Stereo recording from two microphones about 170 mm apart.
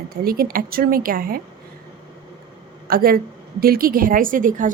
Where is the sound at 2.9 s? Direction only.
60° right (ahead or behind).